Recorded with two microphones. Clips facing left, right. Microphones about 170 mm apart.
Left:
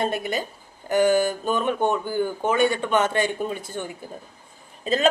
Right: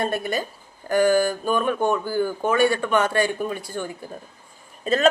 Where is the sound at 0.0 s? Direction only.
20° left (ahead or behind).